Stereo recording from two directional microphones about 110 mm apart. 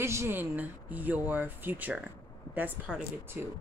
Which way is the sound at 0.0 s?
25° right (ahead or behind).